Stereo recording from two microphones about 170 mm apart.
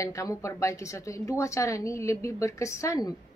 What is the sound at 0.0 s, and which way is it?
A woman's voice, 20° left (ahead or behind).